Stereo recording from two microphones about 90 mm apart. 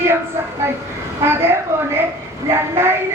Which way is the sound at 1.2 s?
25° right (ahead or behind).